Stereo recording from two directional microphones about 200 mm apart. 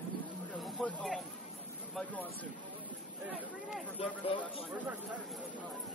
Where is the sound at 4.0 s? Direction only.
30° left (ahead or behind).